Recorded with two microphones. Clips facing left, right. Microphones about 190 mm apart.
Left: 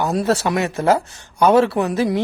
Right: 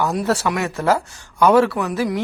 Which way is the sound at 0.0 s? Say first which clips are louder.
Left 1 dB; 25° left (ahead or behind).